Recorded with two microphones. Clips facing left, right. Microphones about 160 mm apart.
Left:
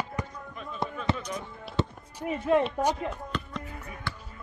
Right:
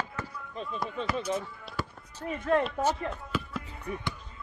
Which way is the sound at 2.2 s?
10° left (ahead or behind).